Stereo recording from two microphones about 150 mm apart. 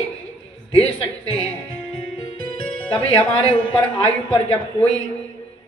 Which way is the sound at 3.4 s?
40° left (ahead or behind).